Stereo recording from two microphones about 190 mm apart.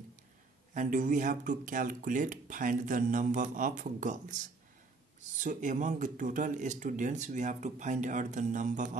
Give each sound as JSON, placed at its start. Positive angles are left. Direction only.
{"t": 0.7, "sound": "speech", "side_deg": -45}
{"t": 5.4, "sound": "speech", "side_deg": -40}